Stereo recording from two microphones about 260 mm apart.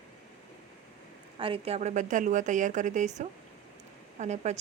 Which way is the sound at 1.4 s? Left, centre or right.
Right.